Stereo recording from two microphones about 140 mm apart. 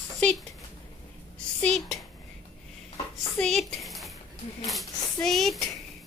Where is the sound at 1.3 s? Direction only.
5° left (ahead or behind).